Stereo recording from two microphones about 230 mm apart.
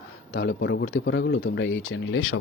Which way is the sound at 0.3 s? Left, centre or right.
Left.